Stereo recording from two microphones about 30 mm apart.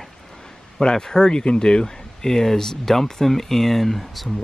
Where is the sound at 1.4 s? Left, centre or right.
Left.